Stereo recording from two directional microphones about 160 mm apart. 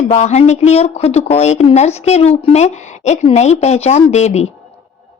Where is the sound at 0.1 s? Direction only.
45° left (ahead or behind).